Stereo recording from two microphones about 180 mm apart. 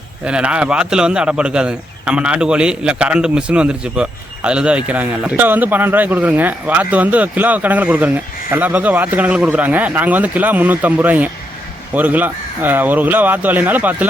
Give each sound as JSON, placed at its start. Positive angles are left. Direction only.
{"t": 0.3, "sound": "speech", "side_deg": -5}